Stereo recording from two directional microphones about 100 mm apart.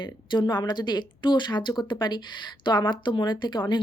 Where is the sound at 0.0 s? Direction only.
50° left (ahead or behind).